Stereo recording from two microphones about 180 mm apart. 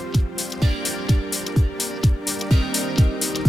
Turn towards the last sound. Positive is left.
turn(degrees=0)  # may be behind; listen again after turning